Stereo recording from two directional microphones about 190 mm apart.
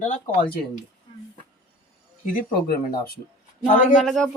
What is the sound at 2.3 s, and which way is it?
Speech, 50° left (ahead or behind).